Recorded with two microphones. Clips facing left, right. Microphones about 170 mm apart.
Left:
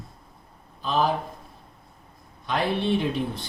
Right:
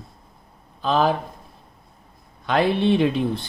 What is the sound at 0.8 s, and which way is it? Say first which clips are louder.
Speech: right 4 dB; 80° right.